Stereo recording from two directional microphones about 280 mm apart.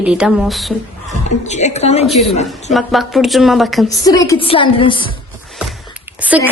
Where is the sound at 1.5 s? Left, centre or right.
Left.